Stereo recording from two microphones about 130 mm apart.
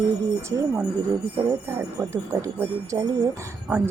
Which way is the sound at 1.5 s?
25° right (ahead or behind).